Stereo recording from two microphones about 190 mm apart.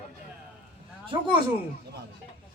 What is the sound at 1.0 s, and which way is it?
Speech, 25° right (ahead or behind).